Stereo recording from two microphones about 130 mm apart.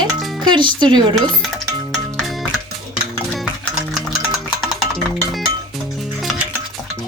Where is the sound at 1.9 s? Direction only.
5° left (ahead or behind).